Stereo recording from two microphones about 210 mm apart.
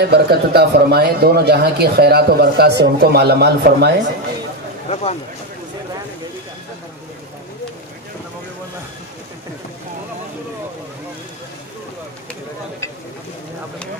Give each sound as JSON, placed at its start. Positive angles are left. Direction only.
{"t": 0.0, "sound": "a man's voice", "side_deg": -50}
{"t": 4.8, "sound": "speech", "side_deg": 30}